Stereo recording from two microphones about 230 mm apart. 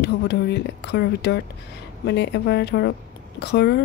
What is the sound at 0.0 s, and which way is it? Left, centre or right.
A woman's voice, left.